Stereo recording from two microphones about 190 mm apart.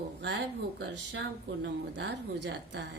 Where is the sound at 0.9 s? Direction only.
70° right (ahead or behind).